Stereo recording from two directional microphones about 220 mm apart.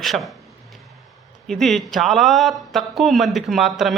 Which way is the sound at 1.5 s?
Centre (ahead or behind).